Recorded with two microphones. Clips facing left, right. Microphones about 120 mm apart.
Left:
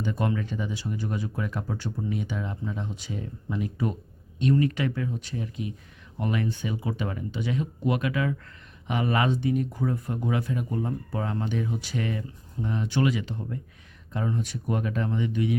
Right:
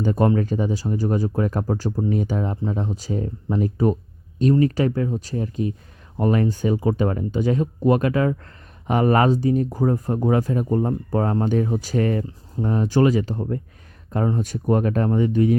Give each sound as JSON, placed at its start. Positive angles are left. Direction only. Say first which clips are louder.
{"t": 0.0, "sound": "speech", "louder": "right 9 dB", "side_deg": -40}